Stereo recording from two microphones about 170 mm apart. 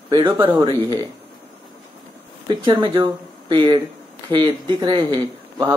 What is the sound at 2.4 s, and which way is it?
Speech, 25° right (ahead or behind).